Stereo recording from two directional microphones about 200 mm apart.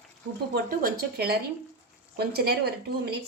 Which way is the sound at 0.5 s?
45° right (ahead or behind).